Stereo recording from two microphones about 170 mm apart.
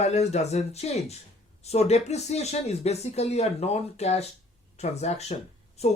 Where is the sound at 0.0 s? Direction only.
40° left (ahead or behind).